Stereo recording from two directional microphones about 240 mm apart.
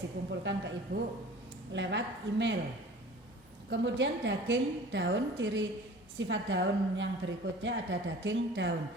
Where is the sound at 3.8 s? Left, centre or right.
Right.